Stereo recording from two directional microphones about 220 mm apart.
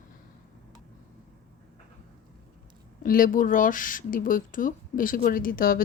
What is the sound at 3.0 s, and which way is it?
Speech, 40° left (ahead or behind).